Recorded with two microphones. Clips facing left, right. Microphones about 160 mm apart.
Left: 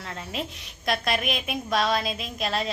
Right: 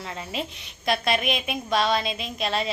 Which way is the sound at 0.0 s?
Centre (ahead or behind).